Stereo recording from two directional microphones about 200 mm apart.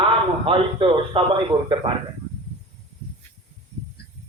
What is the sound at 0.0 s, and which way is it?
A man's voice, 25° right (ahead or behind).